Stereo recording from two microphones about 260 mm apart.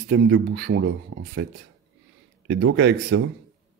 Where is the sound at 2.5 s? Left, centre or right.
Right.